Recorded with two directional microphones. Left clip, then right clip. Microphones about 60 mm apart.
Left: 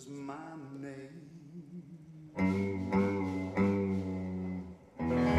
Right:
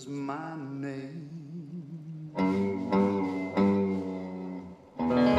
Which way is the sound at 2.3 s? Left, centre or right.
Right.